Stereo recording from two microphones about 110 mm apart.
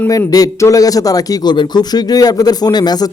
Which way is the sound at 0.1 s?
35° left (ahead or behind).